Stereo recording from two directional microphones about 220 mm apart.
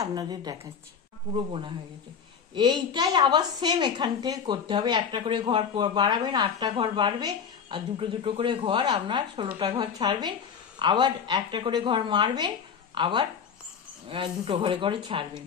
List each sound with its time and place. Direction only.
0.0 s a woman's voice: 15° right (ahead or behind)